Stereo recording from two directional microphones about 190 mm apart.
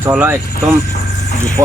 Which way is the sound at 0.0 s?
10° right (ahead or behind).